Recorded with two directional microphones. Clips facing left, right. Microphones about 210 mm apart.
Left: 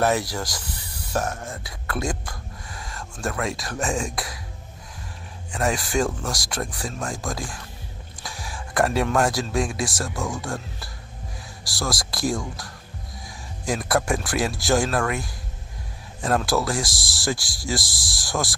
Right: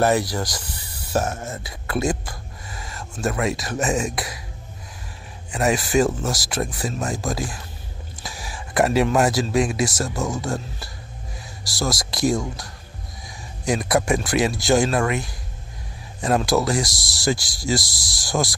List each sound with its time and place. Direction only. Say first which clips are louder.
0.0 s speech: right 3 dB; centre (ahead or behind)
1.2 s speech: right 2 dB; 20° right (ahead or behind)
1.5 s a sound: right 4 dB; 5° right (ahead or behind)
3.9 s speech: right 3 dB; 5° right (ahead or behind)
5.5 s speech: right 4 dB; 5° right (ahead or behind)
11.6 s speech: right 3 dB; centre (ahead or behind)
13.7 s speech: right 3 dB; centre (ahead or behind)